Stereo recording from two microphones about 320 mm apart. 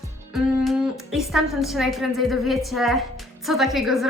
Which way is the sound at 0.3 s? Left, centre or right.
Centre.